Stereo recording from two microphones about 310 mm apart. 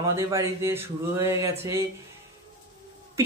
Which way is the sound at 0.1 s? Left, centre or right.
Centre.